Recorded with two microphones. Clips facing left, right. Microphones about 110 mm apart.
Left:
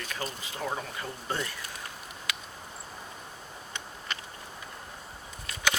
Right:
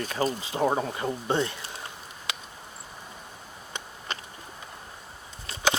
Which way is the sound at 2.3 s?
25° right (ahead or behind).